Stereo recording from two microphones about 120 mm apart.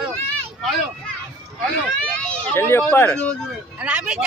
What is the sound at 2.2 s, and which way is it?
A child's voice, 20° left (ahead or behind).